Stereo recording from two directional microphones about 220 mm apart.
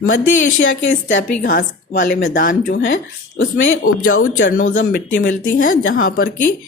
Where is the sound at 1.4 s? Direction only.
40° left (ahead or behind).